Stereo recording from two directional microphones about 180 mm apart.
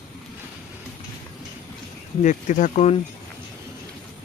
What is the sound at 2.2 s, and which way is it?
Speech, 45° left (ahead or behind).